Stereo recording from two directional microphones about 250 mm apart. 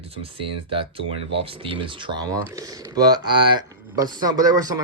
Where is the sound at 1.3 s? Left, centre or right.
Right.